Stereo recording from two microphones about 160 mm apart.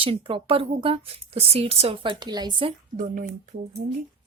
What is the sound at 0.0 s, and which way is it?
Speech, 35° right (ahead or behind).